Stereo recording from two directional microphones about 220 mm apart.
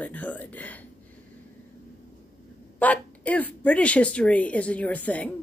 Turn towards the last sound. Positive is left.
turn(degrees=5)  # may be behind; listen again after turning